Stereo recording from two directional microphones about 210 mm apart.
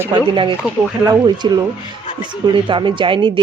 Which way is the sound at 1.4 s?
20° right (ahead or behind).